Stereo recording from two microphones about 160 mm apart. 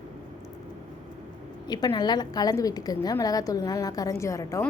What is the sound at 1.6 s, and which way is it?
A woman's voice, 25° left (ahead or behind).